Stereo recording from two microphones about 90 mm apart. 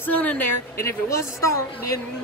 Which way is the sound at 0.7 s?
30° left (ahead or behind).